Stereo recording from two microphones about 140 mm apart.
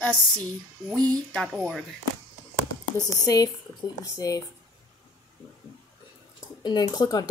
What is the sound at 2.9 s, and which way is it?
Speech, 25° left (ahead or behind).